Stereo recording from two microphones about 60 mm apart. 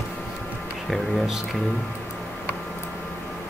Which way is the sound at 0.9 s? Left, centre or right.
Centre.